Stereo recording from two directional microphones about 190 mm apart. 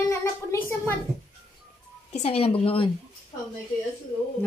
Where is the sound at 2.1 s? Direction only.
35° left (ahead or behind).